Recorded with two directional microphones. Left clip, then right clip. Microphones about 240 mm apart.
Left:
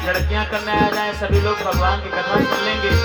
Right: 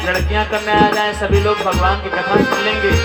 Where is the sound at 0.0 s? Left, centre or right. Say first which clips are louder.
Right 4 dB; centre.